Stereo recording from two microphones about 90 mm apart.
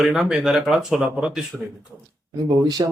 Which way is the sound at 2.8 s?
45° right (ahead or behind).